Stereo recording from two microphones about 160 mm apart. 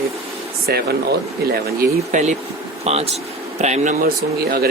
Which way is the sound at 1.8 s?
50° right (ahead or behind).